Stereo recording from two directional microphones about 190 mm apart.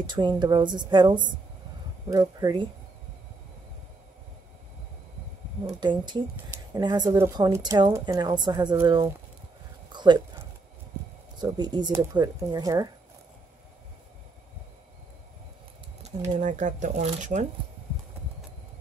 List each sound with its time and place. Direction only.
0.0 s speech: 25° right (ahead or behind)
5.8 s speech: 25° right (ahead or behind)
9.9 s a sound: 25° right (ahead or behind)
11.3 s speech: 20° right (ahead or behind)
16.0 s speech: 40° right (ahead or behind)